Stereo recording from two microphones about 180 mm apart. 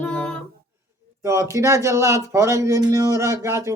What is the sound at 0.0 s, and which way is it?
Music, 5° left (ahead or behind).